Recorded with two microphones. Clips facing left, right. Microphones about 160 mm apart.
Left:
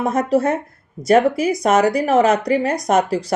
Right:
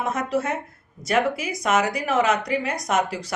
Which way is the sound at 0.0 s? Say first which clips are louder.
Left 7 dB; 35° left (ahead or behind).